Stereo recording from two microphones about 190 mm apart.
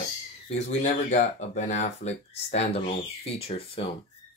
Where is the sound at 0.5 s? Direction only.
40° left (ahead or behind).